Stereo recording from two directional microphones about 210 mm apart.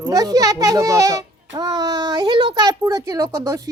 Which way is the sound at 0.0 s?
20° right (ahead or behind).